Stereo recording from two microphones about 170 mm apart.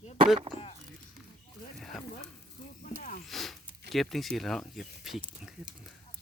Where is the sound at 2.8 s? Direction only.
55° left (ahead or behind).